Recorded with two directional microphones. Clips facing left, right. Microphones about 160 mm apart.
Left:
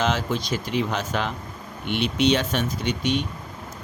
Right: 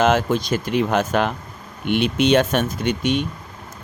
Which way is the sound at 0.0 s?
50° right (ahead or behind).